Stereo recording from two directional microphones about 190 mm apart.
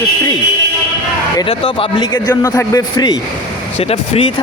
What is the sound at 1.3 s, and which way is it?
Speech, 25° left (ahead or behind).